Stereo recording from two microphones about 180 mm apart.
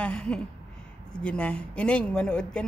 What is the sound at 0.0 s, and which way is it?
A woman's voice, 5° left (ahead or behind).